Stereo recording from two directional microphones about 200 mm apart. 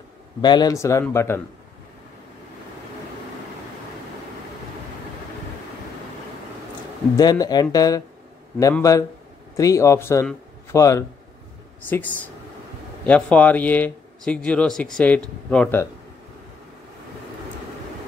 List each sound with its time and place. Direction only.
0.4 s speech: 20° left (ahead or behind)
7.2 s speech: 20° left (ahead or behind)